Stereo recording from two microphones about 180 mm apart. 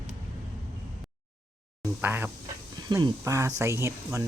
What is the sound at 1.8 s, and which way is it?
Speech, 10° right (ahead or behind).